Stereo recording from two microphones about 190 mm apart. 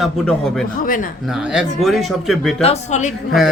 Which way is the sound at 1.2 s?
5° right (ahead or behind).